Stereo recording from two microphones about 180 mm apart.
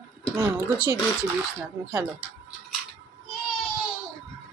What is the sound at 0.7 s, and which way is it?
Speech, 10° right (ahead or behind).